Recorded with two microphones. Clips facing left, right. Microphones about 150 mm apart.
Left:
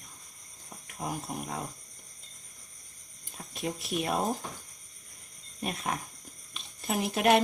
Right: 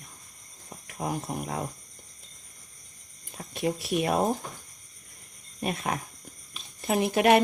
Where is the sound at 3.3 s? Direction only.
80° right.